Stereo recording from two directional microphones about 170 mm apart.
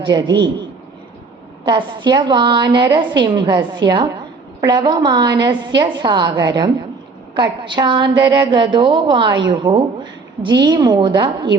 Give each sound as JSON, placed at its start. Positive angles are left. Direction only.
{"t": 0.0, "sound": "a woman's voice", "side_deg": -25}
{"t": 1.6, "sound": "a woman's voice", "side_deg": -25}